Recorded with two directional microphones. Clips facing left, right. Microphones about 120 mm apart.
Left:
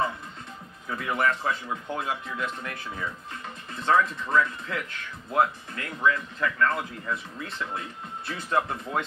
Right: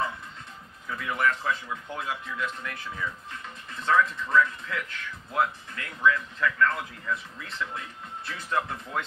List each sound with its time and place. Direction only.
0.8 s speech: 35° left (ahead or behind)